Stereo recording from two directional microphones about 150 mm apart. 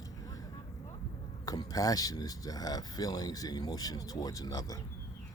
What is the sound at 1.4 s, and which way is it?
Speech, 25° left (ahead or behind).